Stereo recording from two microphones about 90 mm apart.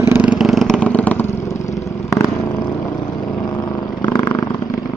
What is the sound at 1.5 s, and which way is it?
Vehicle, 35° left (ahead or behind).